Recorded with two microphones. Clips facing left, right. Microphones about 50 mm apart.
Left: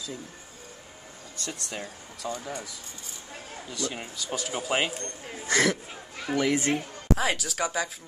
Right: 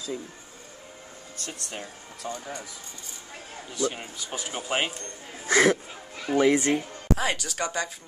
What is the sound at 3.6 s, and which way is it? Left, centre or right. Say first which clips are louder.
A child's voice: right 5 dB; right.